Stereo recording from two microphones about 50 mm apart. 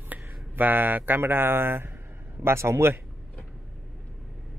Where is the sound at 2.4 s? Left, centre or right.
Right.